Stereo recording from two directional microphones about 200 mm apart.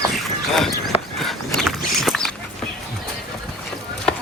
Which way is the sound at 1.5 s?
Centre (ahead or behind).